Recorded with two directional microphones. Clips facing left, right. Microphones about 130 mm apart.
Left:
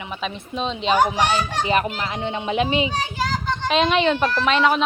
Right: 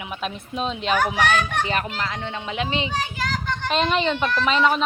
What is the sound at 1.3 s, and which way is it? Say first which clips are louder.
Speech: left 2 dB; 10° left (ahead or behind).